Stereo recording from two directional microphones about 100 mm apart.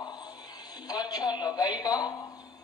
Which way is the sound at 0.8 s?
40° left (ahead or behind).